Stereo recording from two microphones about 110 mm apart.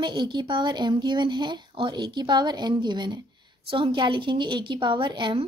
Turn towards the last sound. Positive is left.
turn(degrees=-45)  # may be behind; listen again after turning